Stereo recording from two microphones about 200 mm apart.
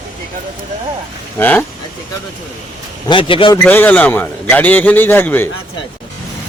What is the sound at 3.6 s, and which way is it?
A man's voice, 10° left (ahead or behind).